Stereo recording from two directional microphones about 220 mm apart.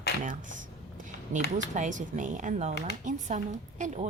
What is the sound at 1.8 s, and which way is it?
Speech, 35° right (ahead or behind).